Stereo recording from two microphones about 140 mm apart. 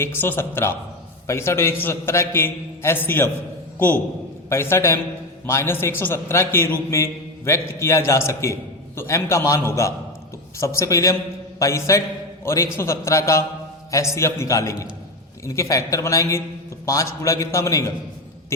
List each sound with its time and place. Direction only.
0.0 s a man's voice: 15° left (ahead or behind)